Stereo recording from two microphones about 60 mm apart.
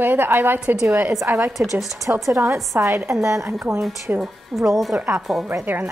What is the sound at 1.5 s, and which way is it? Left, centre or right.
Speech, centre.